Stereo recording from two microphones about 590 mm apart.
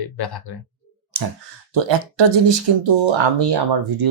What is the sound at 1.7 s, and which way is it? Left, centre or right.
Speech, right.